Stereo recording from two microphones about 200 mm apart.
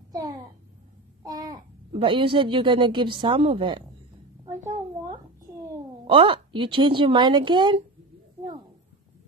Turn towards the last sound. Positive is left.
turn(degrees=-25)  # may be behind; listen again after turning